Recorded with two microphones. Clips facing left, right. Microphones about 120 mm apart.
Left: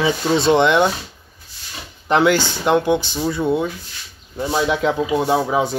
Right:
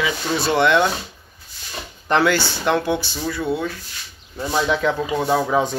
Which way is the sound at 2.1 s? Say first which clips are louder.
Left 2 dB; 15° left (ahead or behind).